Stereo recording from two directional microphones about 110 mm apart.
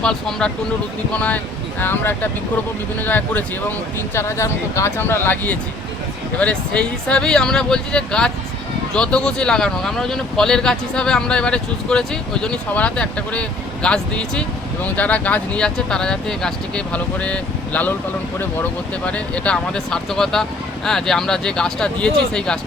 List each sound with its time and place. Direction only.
0.0 s speech: 5° left (ahead or behind)
19.0 s speech: 10° left (ahead or behind)